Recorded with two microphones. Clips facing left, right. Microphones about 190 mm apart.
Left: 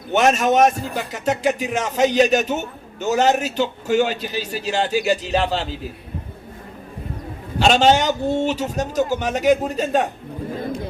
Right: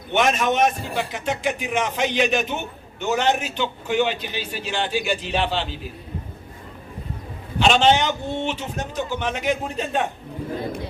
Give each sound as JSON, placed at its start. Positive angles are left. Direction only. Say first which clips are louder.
{"t": 0.1, "sound": "a man's voice", "louder": "left 4 dB", "side_deg": 40}
{"t": 7.6, "sound": "a man's voice", "louder": "left 2 dB", "side_deg": 40}